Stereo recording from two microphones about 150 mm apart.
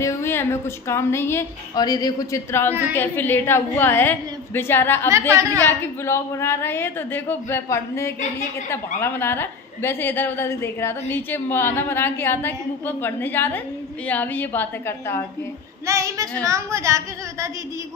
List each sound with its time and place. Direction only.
0.0 s a woman's voice: 20° left (ahead or behind)
5.3 s a woman's voice: 20° right (ahead or behind)
5.6 s a woman's voice: 15° left (ahead or behind)
15.9 s a woman's voice: 20° right (ahead or behind)